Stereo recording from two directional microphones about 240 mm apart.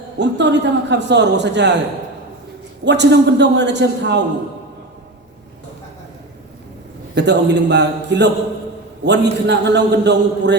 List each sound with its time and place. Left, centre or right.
0.2 s a man's voice: right
2.8 s a man's voice: right
7.2 s a man's voice: right